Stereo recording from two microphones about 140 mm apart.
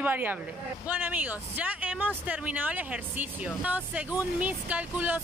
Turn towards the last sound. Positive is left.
turn(degrees=-10)  # may be behind; listen again after turning